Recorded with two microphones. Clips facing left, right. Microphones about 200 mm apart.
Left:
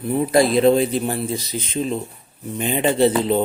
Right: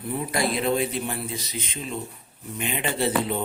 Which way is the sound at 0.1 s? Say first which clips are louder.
Left 10 dB; 35° left (ahead or behind).